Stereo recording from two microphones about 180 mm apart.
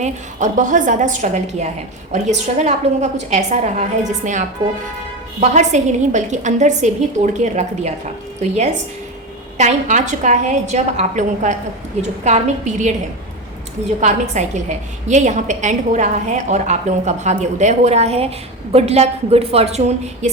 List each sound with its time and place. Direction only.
0.0 s a woman's voice: 45° right (ahead or behind)
5.4 s a woman's voice: 40° right (ahead or behind)
14.0 s a woman's voice: 40° right (ahead or behind)